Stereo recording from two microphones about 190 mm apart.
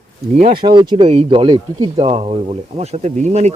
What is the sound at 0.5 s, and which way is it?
Speech, 25° right (ahead or behind).